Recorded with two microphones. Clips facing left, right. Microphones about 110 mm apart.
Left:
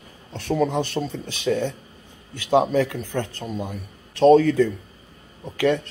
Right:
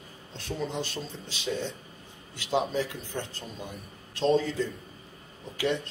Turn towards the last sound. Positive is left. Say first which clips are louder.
# left 8 dB
turn(degrees=55)  # may be behind; listen again after turning